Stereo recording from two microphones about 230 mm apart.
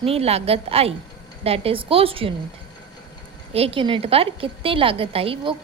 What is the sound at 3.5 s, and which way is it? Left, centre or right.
A woman's voice, right.